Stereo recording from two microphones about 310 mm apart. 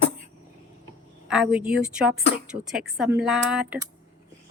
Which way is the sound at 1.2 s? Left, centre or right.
Centre.